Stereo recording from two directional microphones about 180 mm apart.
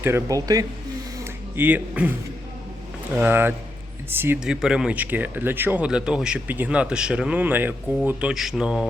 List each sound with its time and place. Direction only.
0.0 s speech: 15° right (ahead or behind)
1.2 s a sound: 10° right (ahead or behind)
3.2 s speech: 10° right (ahead or behind)